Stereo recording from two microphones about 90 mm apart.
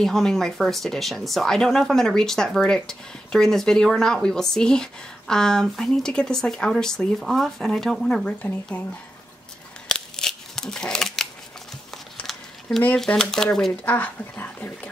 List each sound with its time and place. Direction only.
0.0 s speech: 5° left (ahead or behind)
9.8 s scissors: 5° left (ahead or behind)
11.9 s a sound: 5° left (ahead or behind)
12.8 s speech: 10° left (ahead or behind)
13.8 s speech: 20° left (ahead or behind)